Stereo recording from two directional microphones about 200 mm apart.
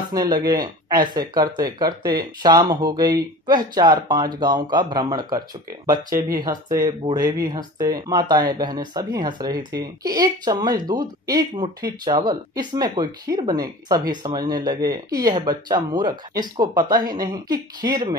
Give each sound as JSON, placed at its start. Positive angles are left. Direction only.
{"t": 0.1, "sound": "speech", "side_deg": -20}